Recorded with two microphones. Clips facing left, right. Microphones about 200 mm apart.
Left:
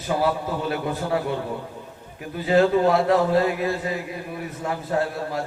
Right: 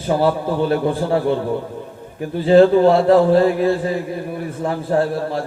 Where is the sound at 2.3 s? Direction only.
30° right (ahead or behind).